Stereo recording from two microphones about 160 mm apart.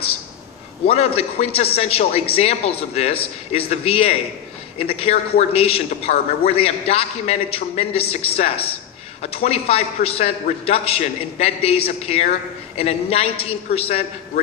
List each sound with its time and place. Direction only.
0.8 s a man's voice: 35° left (ahead or behind)